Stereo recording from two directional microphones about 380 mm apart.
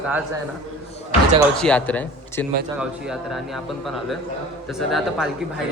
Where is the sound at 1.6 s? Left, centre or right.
Centre.